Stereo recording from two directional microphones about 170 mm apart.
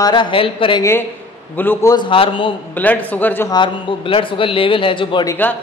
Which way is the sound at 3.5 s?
30° left (ahead or behind).